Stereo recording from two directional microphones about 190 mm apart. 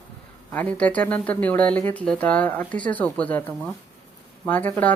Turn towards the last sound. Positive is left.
turn(degrees=10)  # may be behind; listen again after turning